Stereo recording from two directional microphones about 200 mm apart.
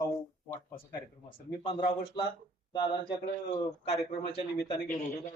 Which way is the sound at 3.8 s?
30° left (ahead or behind).